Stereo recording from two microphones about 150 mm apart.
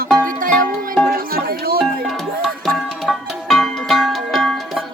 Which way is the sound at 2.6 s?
Centre (ahead or behind).